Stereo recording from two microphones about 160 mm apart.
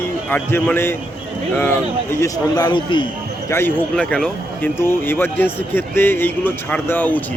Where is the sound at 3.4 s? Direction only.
15° left (ahead or behind).